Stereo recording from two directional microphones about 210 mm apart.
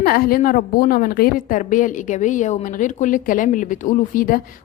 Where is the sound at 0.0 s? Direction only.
45° left (ahead or behind).